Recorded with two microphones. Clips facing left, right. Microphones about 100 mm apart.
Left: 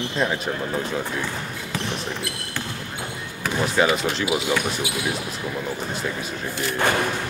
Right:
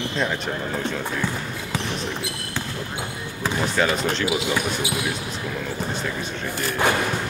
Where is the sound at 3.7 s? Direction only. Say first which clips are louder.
Left 3 dB; 5° left (ahead or behind).